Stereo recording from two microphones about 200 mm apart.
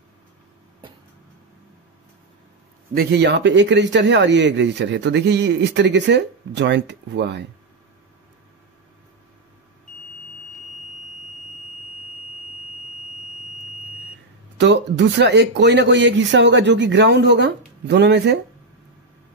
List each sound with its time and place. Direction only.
2.9 s speech: 50° right (ahead or behind)
14.6 s speech: 60° right (ahead or behind)